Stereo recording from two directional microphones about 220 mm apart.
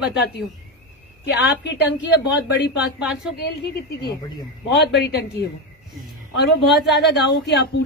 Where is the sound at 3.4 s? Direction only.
50° left (ahead or behind).